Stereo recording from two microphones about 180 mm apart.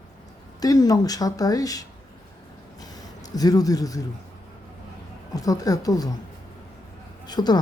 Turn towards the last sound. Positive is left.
turn(degrees=25)  # may be behind; listen again after turning